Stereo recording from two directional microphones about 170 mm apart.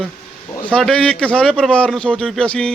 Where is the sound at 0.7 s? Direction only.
5° left (ahead or behind).